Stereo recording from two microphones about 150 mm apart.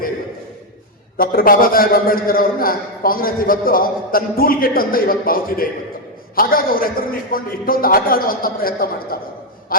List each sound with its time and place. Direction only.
1.1 s a man's voice: 75° left (ahead or behind)